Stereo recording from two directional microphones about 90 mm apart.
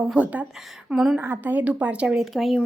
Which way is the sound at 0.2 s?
15° right (ahead or behind).